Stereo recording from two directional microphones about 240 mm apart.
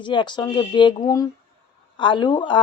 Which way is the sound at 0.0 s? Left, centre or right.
Centre.